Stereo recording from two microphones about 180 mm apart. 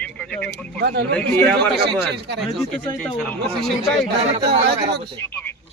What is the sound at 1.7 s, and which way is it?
Speech, 65° right (ahead or behind).